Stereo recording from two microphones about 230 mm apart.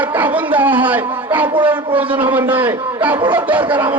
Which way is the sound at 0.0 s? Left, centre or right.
Centre.